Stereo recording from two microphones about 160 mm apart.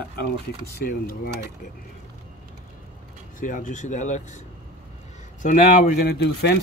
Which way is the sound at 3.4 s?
55° left (ahead or behind).